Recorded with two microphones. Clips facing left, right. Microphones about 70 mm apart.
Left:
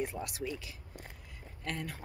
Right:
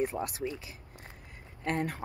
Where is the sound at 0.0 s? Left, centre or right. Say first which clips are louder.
Right 5 dB; right.